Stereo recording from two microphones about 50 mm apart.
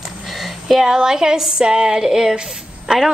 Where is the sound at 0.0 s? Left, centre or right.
Centre.